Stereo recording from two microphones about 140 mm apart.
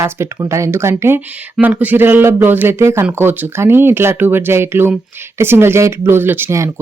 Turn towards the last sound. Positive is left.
turn(degrees=-20)  # may be behind; listen again after turning